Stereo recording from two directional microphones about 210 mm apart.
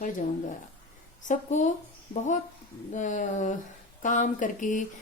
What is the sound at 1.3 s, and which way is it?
Speech, 35° left (ahead or behind).